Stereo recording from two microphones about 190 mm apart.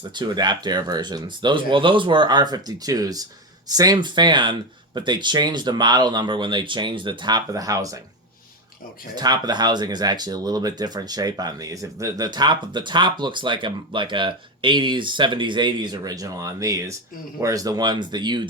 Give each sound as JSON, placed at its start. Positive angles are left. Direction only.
{"t": 0.1, "sound": "speech", "side_deg": -25}
{"t": 9.1, "sound": "speech", "side_deg": -20}